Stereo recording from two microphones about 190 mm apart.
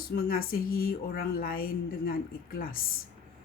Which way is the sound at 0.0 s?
50° left (ahead or behind).